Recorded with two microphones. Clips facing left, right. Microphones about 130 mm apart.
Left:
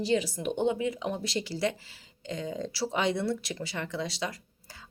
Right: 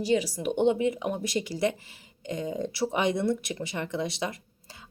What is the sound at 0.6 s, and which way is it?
A woman's voice, 20° right (ahead or behind).